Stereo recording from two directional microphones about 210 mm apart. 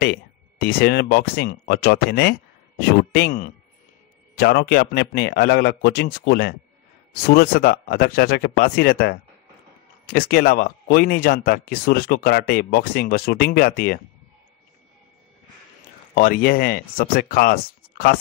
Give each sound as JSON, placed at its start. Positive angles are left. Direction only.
{"t": 0.0, "sound": "speech", "side_deg": 45}
{"t": 4.4, "sound": "speech", "side_deg": 50}
{"t": 16.2, "sound": "speech", "side_deg": 45}